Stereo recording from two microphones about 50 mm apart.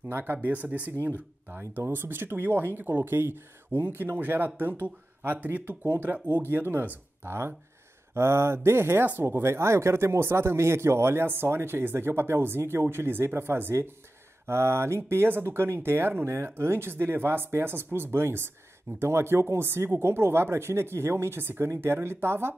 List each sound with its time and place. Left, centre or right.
0.1 s speech: right
1.0 s speech: right
7.2 s speech: right